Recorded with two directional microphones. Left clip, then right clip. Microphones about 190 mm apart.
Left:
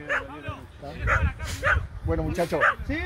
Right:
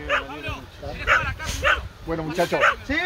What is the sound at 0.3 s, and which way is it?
Speech, 60° right (ahead or behind).